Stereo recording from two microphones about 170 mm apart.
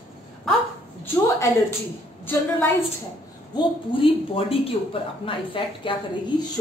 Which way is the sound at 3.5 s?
30° left (ahead or behind).